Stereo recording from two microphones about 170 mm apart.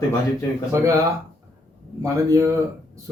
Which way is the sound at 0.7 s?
15° right (ahead or behind).